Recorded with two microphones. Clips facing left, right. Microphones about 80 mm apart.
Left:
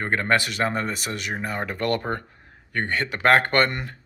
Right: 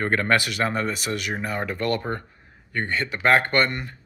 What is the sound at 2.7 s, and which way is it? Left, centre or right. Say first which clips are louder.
Speech: left 1 dB; left.